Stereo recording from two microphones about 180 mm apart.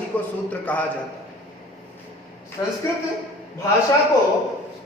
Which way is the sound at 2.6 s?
15° left (ahead or behind).